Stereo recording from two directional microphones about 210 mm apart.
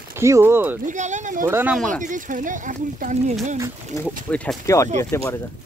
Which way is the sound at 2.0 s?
40° right (ahead or behind).